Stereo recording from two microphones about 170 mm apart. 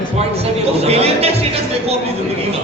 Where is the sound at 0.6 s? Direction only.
35° right (ahead or behind).